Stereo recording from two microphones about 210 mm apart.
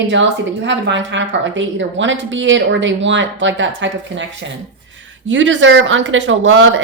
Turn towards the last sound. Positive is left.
turn(degrees=-65)  # may be behind; listen again after turning